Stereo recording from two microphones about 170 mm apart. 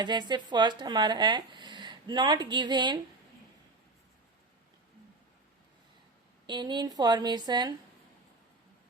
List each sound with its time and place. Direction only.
0.0 s speech: 25° right (ahead or behind)
6.5 s speech: 25° right (ahead or behind)